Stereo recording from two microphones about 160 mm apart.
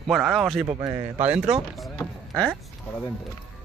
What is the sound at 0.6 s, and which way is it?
Speech, 20° right (ahead or behind).